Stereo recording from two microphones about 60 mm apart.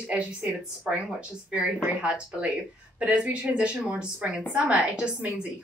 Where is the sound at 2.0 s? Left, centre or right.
Centre.